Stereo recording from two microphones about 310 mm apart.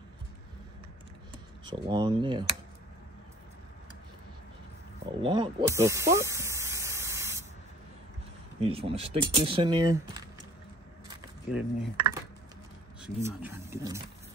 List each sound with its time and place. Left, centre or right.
1.7 s speech: centre
5.0 s spray: centre
8.5 s speech: centre
11.5 s speech: centre